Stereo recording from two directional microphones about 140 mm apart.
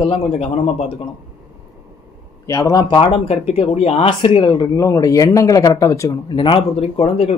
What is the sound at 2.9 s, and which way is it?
Speech, 40° left (ahead or behind).